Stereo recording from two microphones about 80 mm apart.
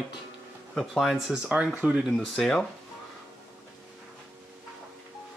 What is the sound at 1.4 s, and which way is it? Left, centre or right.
Speech, centre.